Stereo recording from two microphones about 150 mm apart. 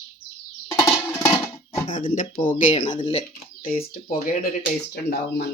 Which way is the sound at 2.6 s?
55° left (ahead or behind).